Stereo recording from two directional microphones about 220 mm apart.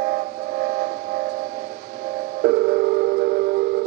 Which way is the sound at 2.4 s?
45° right (ahead or behind).